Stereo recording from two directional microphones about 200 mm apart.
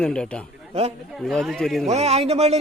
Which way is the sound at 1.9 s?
30° right (ahead or behind).